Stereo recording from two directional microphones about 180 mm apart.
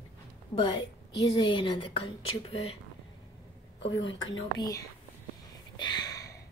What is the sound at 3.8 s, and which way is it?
A woman's voice, 25° left (ahead or behind).